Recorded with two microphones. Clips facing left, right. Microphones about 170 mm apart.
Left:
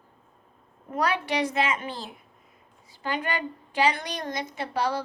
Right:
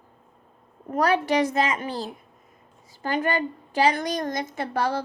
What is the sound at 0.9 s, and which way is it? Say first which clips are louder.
A child's voice: right 5 dB; 45° right (ahead or behind).